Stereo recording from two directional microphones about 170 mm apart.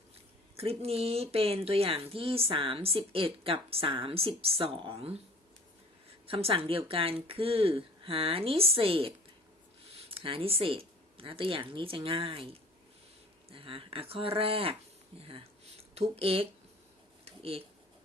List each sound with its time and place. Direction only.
0.5 s a woman's voice: 35° right (ahead or behind)
6.2 s a woman's voice: 35° right (ahead or behind)
16.0 s a woman's voice: 35° right (ahead or behind)
17.2 s a sound: 35° right (ahead or behind)